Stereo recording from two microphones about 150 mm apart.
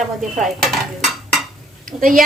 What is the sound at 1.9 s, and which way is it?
Speech, 65° right (ahead or behind).